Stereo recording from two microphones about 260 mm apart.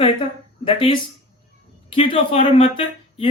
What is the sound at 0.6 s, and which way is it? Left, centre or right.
Speech, centre.